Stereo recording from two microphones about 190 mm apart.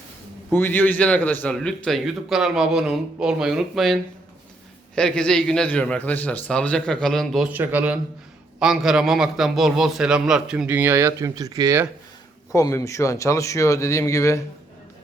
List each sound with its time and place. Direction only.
0.5 s a man's voice: 10° left (ahead or behind); by 11.9 s 20° right (ahead or behind)
12.5 s speech: 15° left (ahead or behind)